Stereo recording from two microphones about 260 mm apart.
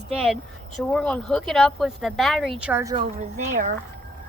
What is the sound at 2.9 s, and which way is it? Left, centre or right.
Speech, right.